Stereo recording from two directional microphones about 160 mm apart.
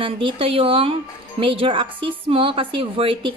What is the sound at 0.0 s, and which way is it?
A woman's voice, 35° right (ahead or behind).